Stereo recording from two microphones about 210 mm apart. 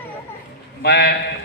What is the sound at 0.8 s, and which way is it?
Speech, 50° left (ahead or behind).